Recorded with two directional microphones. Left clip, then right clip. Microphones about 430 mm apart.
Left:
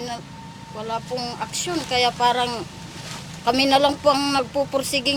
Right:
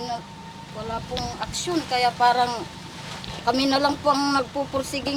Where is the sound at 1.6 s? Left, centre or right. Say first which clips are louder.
Left 1 dB; left.